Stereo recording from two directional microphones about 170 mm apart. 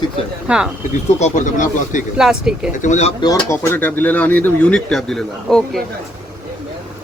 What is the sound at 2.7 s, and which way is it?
Speech, 45° left (ahead or behind).